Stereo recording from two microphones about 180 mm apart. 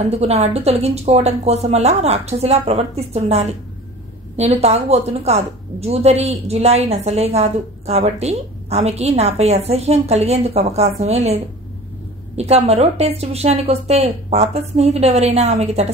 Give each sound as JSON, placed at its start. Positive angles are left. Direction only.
{"t": 0.1, "sound": "a woman's voice", "side_deg": -35}